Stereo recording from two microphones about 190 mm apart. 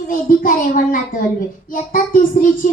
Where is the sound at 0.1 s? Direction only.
50° left (ahead or behind).